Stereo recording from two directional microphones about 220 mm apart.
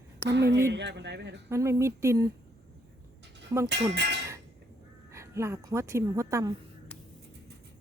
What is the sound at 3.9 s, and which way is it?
Clang, 50° right (ahead or behind).